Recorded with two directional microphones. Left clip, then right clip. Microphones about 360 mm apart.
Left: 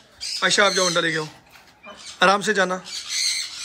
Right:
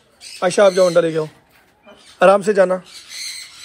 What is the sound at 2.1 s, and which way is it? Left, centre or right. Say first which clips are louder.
Speech: right 6 dB; centre.